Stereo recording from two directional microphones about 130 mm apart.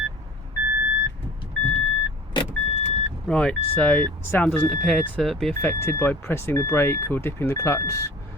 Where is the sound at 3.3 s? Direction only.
10° left (ahead or behind).